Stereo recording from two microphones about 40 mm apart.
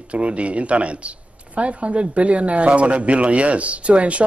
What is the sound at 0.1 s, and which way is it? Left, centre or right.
Speech, right.